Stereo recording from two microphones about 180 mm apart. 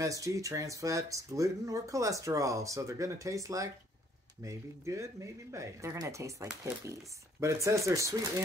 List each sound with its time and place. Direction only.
0.0 s speech: 20° right (ahead or behind)